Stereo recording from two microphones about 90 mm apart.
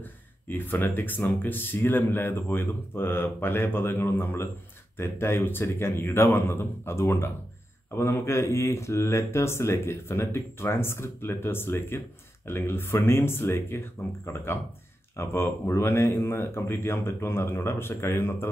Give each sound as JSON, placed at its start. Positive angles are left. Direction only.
{"t": 0.0, "sound": "speech", "side_deg": 20}